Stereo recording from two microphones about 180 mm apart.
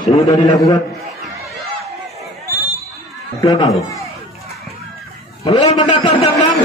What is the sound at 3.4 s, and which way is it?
Speech, 20° left (ahead or behind).